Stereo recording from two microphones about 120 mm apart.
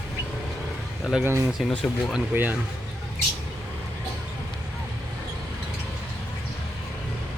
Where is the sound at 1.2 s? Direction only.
20° right (ahead or behind).